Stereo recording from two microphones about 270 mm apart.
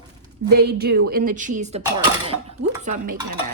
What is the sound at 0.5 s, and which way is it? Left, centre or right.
A woman's voice, right.